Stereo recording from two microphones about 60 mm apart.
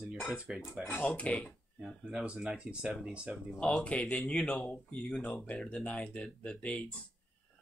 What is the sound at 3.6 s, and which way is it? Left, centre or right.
Speech, left.